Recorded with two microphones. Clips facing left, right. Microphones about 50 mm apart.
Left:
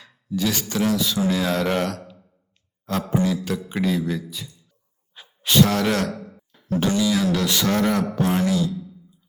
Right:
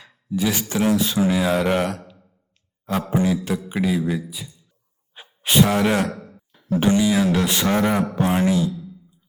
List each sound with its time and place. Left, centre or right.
0.3 s speech: right
1.3 s a man's voice: centre
5.1 s speech: right